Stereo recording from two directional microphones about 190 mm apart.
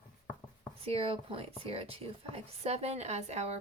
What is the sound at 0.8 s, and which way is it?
Speech, 30° right (ahead or behind).